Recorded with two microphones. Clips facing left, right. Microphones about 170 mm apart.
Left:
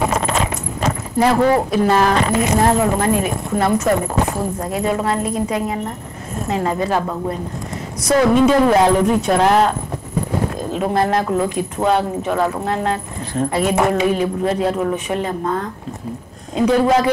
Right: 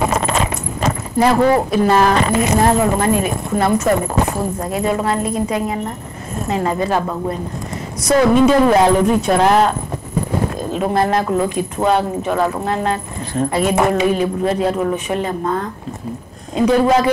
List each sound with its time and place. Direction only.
0.0 s keys jangling: 15° right (ahead or behind)
0.8 s speech: 20° right (ahead or behind)
10.3 s a sound: 20° right (ahead or behind)
11.2 s speech: 20° right (ahead or behind)